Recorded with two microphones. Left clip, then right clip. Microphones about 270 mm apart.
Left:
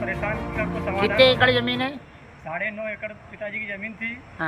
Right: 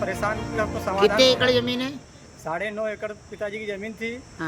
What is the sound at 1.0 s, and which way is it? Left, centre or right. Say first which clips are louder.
Speech: left 1 dB; centre.